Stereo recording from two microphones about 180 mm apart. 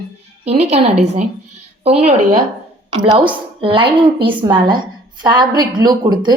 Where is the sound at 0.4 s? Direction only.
35° right (ahead or behind).